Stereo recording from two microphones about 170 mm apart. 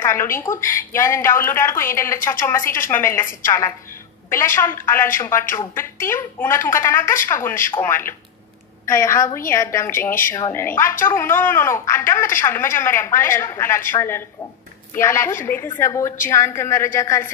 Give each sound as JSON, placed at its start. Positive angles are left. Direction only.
{"t": 0.0, "sound": "speech", "side_deg": 15}